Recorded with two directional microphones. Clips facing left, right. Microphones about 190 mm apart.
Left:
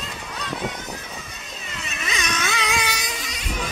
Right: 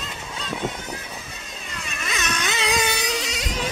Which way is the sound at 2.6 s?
40° right (ahead or behind).